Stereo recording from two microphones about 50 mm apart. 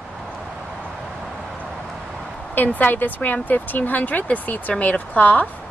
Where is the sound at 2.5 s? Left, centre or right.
Left.